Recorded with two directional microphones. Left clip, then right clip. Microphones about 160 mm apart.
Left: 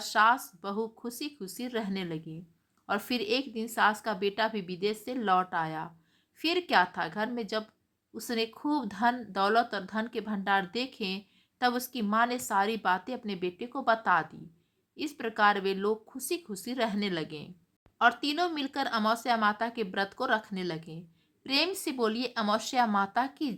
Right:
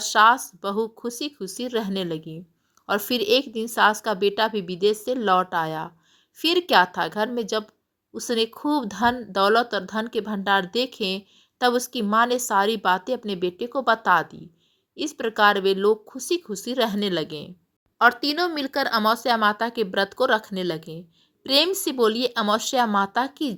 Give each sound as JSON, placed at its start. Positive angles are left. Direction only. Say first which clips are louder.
{"t": 0.0, "sound": "a woman's voice", "louder": "right 8 dB", "side_deg": -30}